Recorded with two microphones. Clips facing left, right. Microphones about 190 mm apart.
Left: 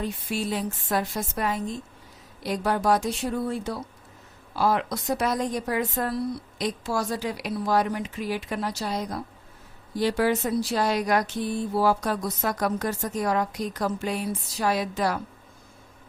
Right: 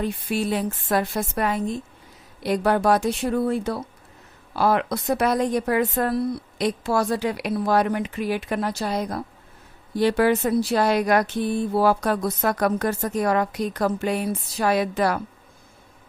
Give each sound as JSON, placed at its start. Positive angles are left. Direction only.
{"t": 0.0, "sound": "speech", "side_deg": -60}